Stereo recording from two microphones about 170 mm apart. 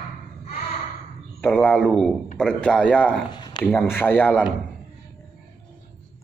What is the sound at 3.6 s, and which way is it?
Speech, 10° left (ahead or behind).